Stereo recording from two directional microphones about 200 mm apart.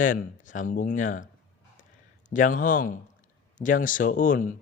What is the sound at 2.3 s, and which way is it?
Speech, 40° left (ahead or behind).